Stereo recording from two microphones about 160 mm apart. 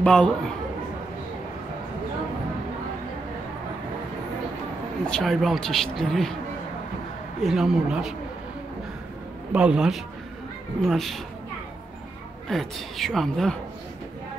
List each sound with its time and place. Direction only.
0.0 s speech: 5° left (ahead or behind)
5.0 s speech: 5° left (ahead or behind)
7.4 s speech: centre (ahead or behind)
9.5 s speech: 5° right (ahead or behind)
12.4 s speech: centre (ahead or behind)